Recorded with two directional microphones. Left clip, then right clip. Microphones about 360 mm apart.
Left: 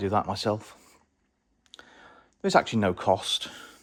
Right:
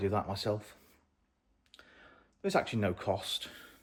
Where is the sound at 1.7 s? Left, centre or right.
Centre.